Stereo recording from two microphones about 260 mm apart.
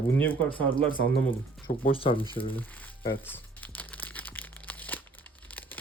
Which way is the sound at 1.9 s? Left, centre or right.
Left.